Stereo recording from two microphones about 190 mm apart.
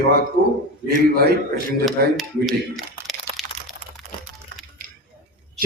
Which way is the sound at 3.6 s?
35° right (ahead or behind).